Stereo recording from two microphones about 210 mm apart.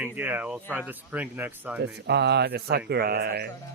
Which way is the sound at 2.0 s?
50° right (ahead or behind).